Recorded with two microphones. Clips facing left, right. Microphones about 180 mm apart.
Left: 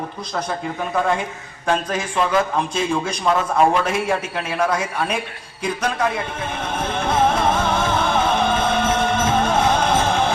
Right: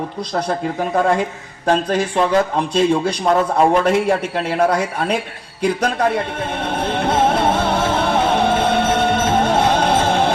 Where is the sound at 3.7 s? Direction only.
60° right (ahead or behind).